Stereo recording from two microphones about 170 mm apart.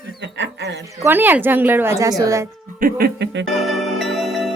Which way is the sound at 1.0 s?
10° right (ahead or behind).